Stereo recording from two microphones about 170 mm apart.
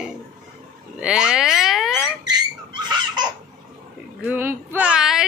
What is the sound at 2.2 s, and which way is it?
Dog, 25° right (ahead or behind).